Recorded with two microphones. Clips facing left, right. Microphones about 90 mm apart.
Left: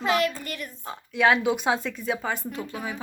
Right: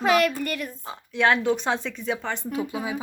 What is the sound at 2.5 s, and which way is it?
Speech, 15° right (ahead or behind).